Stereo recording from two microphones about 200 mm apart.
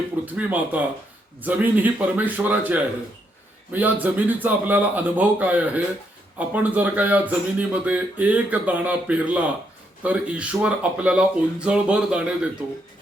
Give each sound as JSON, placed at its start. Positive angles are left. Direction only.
{"t": 0.3, "sound": "speech", "side_deg": -10}